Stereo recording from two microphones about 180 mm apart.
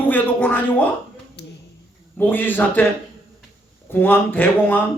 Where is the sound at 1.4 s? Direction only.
70° left (ahead or behind).